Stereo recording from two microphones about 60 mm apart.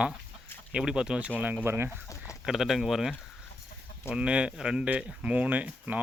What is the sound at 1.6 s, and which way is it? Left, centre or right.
Speech, right.